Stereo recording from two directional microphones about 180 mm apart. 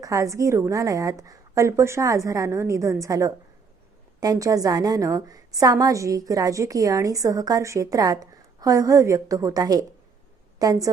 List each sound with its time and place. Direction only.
0.0 s a woman's voice: 15° right (ahead or behind)